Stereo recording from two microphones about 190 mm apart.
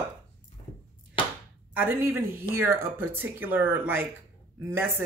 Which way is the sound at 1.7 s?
10° right (ahead or behind).